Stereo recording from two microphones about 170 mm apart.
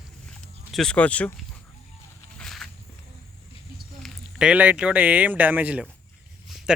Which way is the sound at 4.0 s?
Centre (ahead or behind).